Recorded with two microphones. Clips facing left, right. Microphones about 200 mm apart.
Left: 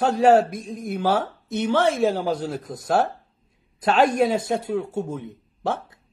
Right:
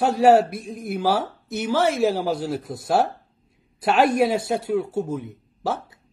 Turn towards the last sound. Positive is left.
turn(degrees=-5)  # may be behind; listen again after turning